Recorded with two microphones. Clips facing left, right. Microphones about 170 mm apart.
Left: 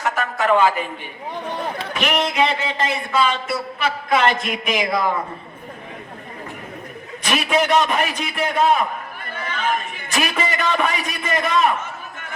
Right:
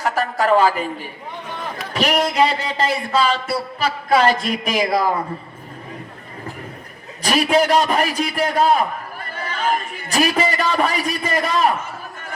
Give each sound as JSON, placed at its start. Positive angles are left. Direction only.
{"t": 0.0, "sound": "a sound", "side_deg": -35}
{"t": 1.9, "sound": "speech", "side_deg": -35}
{"t": 7.2, "sound": "a man's voice", "side_deg": -35}